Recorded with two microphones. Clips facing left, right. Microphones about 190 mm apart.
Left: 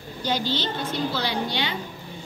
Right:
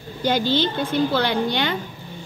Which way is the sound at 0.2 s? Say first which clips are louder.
Right 6 dB; 55° right (ahead or behind).